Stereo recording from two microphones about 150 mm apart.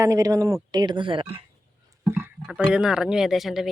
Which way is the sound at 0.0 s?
20° right (ahead or behind).